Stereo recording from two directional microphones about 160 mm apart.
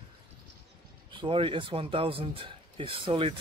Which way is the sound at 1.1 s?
30° right (ahead or behind).